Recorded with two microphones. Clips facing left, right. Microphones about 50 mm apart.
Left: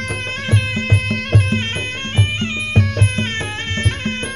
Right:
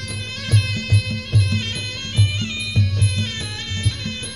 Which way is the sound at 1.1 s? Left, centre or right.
Left.